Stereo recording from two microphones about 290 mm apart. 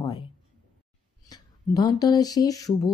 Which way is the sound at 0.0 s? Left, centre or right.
Centre.